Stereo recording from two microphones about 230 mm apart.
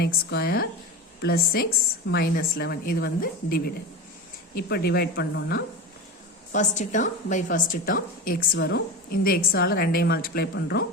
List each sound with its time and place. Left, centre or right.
0.0 s a woman's voice: left
6.5 s a woman's voice: left